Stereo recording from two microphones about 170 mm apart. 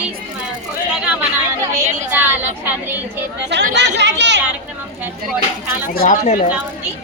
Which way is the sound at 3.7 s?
90° right.